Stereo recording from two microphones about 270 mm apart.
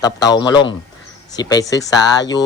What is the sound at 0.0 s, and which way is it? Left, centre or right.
Speech, centre.